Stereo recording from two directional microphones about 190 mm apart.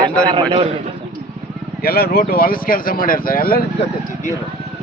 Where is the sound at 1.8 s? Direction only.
55° left (ahead or behind).